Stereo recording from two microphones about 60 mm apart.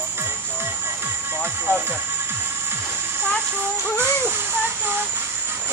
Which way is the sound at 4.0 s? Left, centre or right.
Right.